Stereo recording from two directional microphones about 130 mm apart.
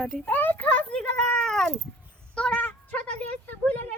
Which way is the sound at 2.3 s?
10° left (ahead or behind).